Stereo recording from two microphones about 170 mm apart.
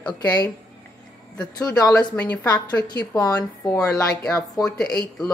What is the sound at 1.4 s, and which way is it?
Speech, 20° left (ahead or behind).